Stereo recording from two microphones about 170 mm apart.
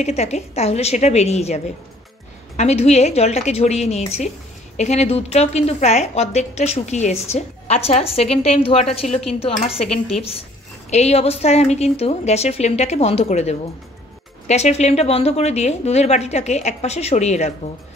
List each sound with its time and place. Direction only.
0.0 s a woman's voice: 40° left (ahead or behind)
9.8 s speech: centre (ahead or behind)
10.9 s a woman's voice: 40° left (ahead or behind)